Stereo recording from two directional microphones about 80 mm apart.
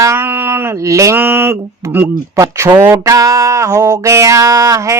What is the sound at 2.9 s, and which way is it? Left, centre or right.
Music, right.